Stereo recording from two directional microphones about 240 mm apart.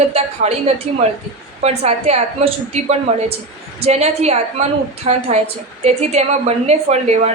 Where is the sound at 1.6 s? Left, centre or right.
Right.